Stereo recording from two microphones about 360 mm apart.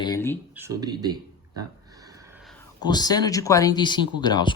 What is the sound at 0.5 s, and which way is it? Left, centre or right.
Speech, centre.